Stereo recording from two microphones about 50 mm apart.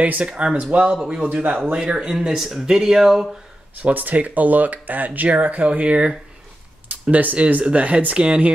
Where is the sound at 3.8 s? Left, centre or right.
Right.